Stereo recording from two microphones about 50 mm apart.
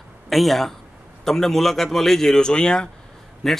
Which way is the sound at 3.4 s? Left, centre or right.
Centre.